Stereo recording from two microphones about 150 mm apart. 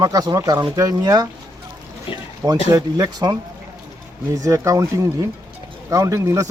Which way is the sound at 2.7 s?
25° right (ahead or behind).